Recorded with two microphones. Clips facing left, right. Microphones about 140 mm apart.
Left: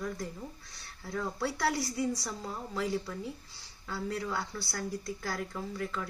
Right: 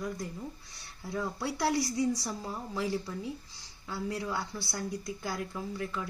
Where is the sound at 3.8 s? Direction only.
10° right (ahead or behind).